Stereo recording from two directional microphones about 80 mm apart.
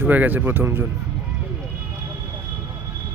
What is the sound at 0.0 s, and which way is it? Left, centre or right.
Speech, right.